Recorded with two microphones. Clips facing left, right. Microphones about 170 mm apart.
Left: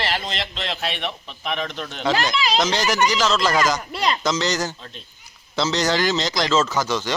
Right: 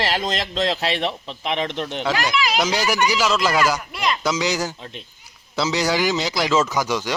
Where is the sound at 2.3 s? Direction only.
10° right (ahead or behind).